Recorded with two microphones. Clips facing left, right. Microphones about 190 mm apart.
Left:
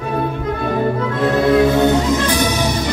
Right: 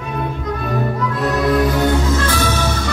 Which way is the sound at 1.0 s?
25° left (ahead or behind).